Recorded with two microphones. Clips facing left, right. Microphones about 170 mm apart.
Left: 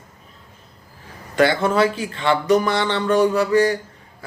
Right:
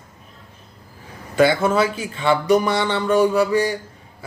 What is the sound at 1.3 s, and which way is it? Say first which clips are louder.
A man's voice: right 1 dB; 10° right (ahead or behind).